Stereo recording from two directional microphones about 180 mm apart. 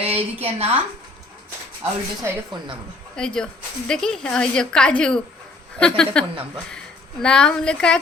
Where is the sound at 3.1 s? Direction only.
5° left (ahead or behind).